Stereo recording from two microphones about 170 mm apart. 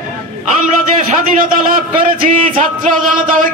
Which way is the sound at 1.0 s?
50° right (ahead or behind).